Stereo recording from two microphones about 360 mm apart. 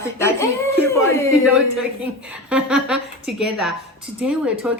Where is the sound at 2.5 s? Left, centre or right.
Centre.